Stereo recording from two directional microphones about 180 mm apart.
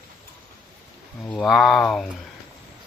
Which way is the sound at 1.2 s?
5° left (ahead or behind).